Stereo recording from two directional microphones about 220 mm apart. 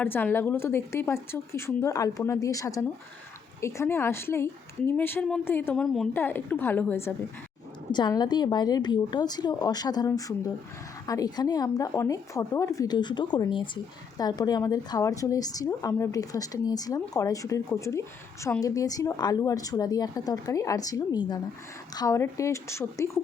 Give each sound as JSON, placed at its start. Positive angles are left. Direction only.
{"t": 0.0, "sound": "a woman's voice", "side_deg": 10}
{"t": 7.9, "sound": "a woman's voice", "side_deg": 20}